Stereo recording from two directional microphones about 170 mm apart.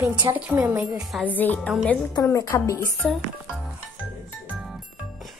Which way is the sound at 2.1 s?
20° left (ahead or behind).